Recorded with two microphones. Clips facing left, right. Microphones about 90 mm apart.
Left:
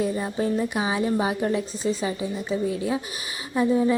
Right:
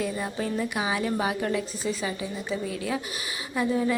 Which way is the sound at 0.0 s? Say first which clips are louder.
Left 4 dB; 30° left (ahead or behind).